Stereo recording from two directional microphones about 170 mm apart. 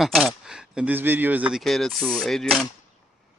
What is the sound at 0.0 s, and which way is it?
Speech, centre (ahead or behind).